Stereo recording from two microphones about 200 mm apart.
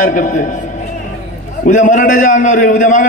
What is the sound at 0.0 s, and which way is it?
Speech, 40° left (ahead or behind).